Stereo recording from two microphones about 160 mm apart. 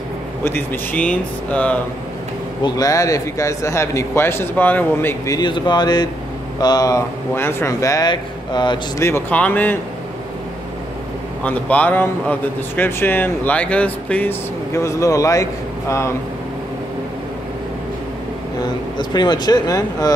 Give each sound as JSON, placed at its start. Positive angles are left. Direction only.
{"t": 0.4, "sound": "a man's voice", "side_deg": 10}
{"t": 2.6, "sound": "speech", "side_deg": 20}
{"t": 9.0, "sound": "a man's voice", "side_deg": 10}
{"t": 11.4, "sound": "a man's voice", "side_deg": 10}
{"t": 18.9, "sound": "speech", "side_deg": 25}